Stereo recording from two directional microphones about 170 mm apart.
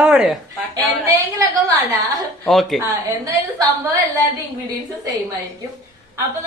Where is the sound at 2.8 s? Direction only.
20° right (ahead or behind).